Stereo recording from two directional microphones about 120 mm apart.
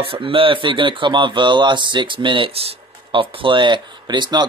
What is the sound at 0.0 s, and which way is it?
Speech, 50° right (ahead or behind).